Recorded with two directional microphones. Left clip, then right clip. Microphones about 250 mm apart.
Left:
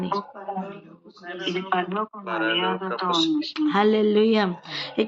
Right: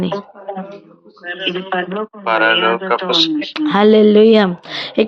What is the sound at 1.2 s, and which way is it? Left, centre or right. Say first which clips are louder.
A man's voice: right 8 dB; centre.